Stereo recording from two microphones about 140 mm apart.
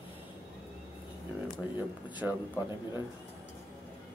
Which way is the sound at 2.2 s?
Centre (ahead or behind).